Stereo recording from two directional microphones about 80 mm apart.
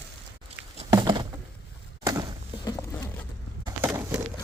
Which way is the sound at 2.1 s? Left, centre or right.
Right.